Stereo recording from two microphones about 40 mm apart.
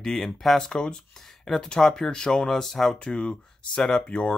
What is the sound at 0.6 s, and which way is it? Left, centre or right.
Speech, centre.